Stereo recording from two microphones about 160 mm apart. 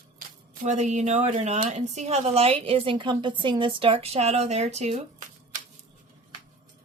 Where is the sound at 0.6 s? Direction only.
45° right (ahead or behind).